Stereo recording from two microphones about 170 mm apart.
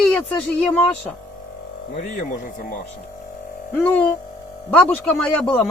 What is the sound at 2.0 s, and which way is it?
Speech, 50° left (ahead or behind).